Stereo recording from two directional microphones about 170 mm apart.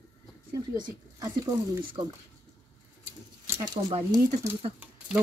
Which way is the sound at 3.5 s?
25° right (ahead or behind).